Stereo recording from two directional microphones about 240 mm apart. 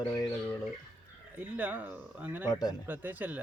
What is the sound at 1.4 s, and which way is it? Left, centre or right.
Speech, centre.